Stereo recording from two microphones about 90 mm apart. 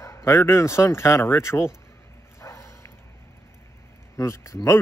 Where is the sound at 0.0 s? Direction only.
35° left (ahead or behind).